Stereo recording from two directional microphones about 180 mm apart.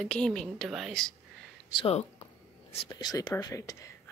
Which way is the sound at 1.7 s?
30° left (ahead or behind).